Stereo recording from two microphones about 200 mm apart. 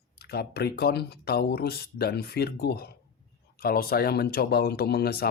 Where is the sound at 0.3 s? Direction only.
55° left (ahead or behind).